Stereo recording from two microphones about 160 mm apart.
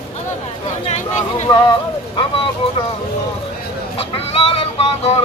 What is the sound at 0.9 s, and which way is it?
Speech, 45° left (ahead or behind).